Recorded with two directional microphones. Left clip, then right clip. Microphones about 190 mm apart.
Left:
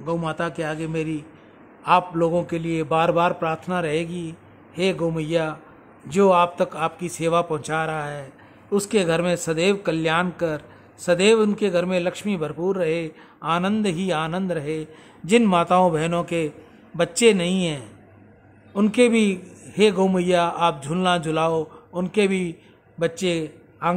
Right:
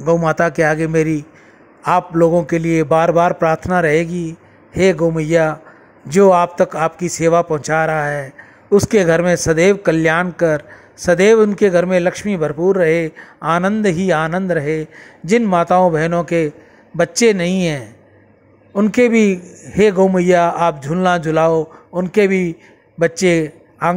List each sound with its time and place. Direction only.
0.0 s a man's voice: 30° right (ahead or behind)